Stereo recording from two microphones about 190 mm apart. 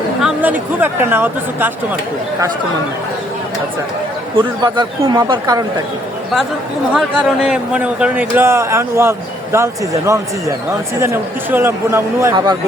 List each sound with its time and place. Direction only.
0.2 s speech: 5° right (ahead or behind)
4.6 s speech: 25° right (ahead or behind)
6.9 s a man's voice: 5° right (ahead or behind)